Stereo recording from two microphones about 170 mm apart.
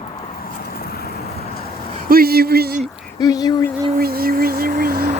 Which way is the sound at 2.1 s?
60° right (ahead or behind).